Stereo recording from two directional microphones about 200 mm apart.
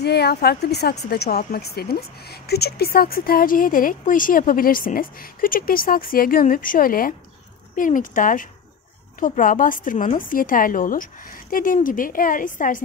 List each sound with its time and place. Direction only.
0.0 s a woman's voice: 55° left (ahead or behind)